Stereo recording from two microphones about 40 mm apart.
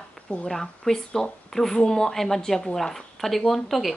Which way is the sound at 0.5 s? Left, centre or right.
Centre.